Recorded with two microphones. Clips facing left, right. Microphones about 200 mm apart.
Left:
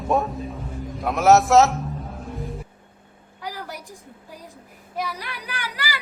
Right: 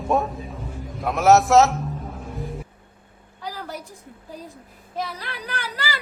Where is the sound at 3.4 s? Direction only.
15° left (ahead or behind).